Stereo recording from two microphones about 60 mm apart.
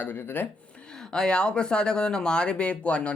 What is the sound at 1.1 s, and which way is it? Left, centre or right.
Speech, centre.